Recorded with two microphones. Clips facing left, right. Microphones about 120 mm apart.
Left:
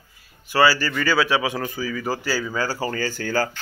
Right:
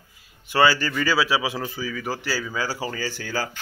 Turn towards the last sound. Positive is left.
turn(degrees=-5)  # may be behind; listen again after turning